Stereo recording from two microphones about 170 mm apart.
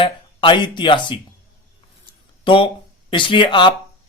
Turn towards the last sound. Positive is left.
turn(degrees=30)  # may be behind; listen again after turning